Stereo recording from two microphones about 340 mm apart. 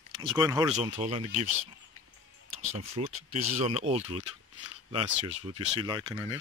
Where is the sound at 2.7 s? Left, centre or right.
Centre.